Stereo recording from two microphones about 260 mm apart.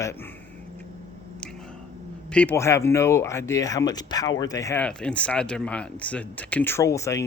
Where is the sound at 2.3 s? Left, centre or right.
Centre.